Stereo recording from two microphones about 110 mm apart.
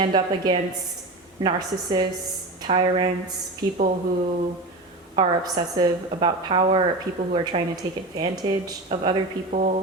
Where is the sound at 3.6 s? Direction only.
30° right (ahead or behind).